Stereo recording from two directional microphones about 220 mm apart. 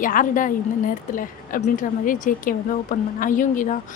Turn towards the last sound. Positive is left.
turn(degrees=35)  # may be behind; listen again after turning